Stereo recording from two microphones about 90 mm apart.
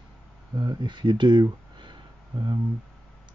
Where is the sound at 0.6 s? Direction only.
60° right (ahead or behind).